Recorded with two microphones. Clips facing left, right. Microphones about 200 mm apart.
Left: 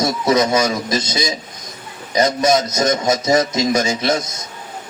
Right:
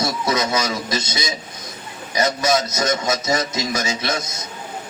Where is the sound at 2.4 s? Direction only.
25° left (ahead or behind).